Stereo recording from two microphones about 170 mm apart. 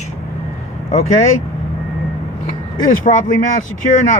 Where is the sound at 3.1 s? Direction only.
50° left (ahead or behind).